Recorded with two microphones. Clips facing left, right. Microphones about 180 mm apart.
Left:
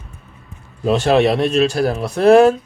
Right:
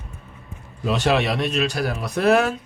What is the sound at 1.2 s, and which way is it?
Speech, 30° left (ahead or behind).